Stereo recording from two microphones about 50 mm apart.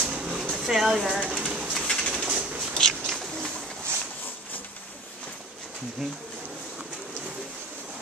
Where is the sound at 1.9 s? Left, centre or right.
Centre.